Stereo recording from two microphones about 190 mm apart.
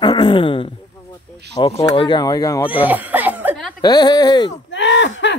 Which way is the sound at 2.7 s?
10° right (ahead or behind).